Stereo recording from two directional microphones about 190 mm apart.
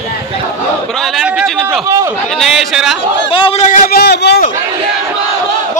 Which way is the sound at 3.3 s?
30° left (ahead or behind).